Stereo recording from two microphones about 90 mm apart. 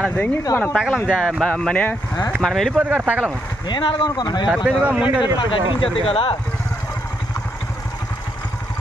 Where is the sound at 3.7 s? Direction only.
60° left (ahead or behind).